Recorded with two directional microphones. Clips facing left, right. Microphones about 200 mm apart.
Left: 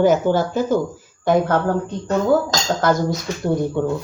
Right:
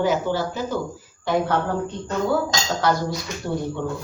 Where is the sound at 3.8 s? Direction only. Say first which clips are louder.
Left 7 dB; 45° left (ahead or behind).